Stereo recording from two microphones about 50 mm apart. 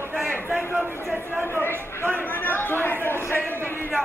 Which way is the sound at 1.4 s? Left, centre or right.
Left.